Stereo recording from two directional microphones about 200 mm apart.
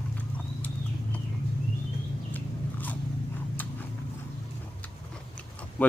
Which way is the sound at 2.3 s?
10° left (ahead or behind).